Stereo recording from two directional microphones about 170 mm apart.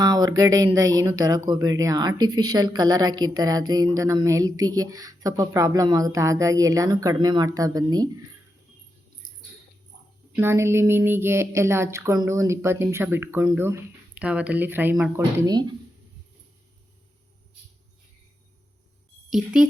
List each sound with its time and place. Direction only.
0.0 s speech: 20° right (ahead or behind)
9.2 s rodents: 50° left (ahead or behind)
10.3 s speech: 15° right (ahead or behind)